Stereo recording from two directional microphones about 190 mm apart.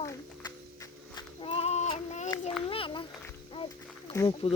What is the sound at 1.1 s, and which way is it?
Child singing, 30° left (ahead or behind).